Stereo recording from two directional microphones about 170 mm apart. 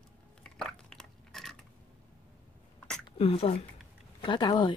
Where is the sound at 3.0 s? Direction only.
30° left (ahead or behind).